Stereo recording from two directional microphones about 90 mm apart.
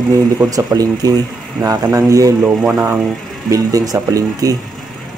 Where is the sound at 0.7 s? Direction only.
40° right (ahead or behind).